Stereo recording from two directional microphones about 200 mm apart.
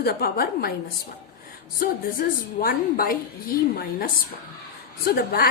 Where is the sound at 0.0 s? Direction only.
50° left (ahead or behind).